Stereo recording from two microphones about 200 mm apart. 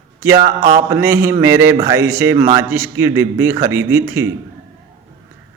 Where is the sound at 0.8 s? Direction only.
15° right (ahead or behind).